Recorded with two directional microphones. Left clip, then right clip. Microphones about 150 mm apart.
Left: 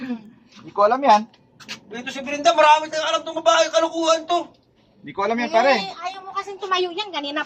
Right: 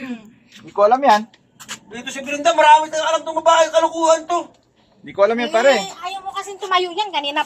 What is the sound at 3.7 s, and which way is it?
Speech, 20° right (ahead or behind).